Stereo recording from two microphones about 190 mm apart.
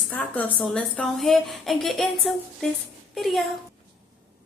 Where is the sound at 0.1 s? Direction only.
10° left (ahead or behind).